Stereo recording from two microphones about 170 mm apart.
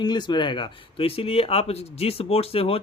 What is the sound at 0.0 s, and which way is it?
Speech, 25° left (ahead or behind).